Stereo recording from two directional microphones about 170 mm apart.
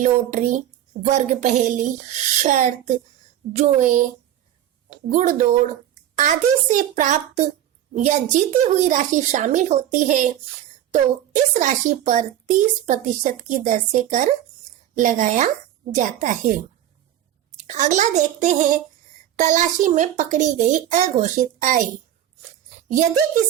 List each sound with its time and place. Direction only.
0.0 s a child's voice: 45° right (ahead or behind)
5.0 s a child's voice: 45° right (ahead or behind)
17.6 s a child's voice: 45° right (ahead or behind)